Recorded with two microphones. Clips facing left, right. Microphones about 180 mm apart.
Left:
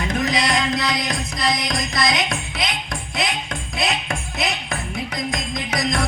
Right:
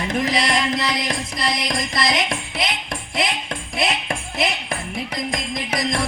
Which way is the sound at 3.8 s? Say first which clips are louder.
Right 1 dB; 25° right (ahead or behind).